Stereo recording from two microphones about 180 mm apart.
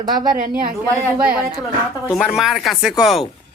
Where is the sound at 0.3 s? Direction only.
50° right (ahead or behind).